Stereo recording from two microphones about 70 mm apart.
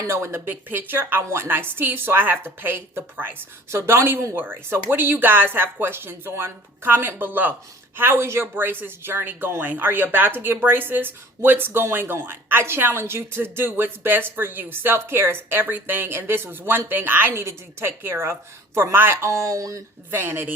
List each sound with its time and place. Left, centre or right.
0.1 s a woman's voice: right
3.7 s a woman's voice: right
4.4 s a woman's voice: right
20.1 s a woman's voice: right